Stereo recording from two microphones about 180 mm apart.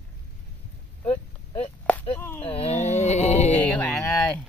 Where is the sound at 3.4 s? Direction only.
5° left (ahead or behind).